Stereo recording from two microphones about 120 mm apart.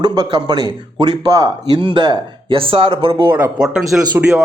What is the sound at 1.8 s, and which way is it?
A man's voice, 45° right (ahead or behind).